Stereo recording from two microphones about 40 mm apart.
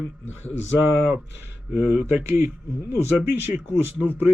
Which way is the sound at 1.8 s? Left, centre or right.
Right.